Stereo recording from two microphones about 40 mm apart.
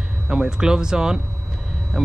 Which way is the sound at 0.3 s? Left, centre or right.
Centre.